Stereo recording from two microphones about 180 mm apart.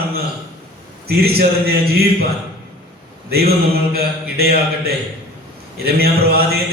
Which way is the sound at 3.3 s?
60° right (ahead or behind).